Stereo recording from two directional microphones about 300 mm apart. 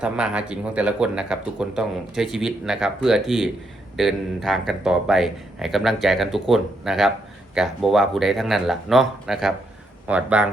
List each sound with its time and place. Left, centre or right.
0.0 s speech: centre